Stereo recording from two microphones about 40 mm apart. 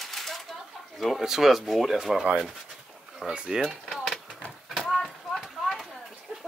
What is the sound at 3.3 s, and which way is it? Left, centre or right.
Speech, right.